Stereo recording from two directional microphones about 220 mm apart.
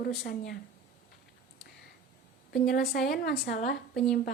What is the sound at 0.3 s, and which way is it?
Speech, 45° left (ahead or behind).